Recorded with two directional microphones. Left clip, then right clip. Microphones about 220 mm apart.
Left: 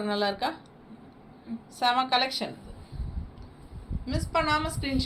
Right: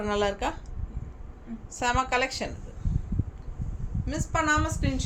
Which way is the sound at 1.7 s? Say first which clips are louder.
Left 2 dB; 30° right (ahead or behind).